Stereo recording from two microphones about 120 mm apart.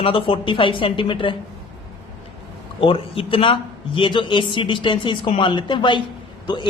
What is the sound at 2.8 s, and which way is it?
A man's voice, 50° left (ahead or behind).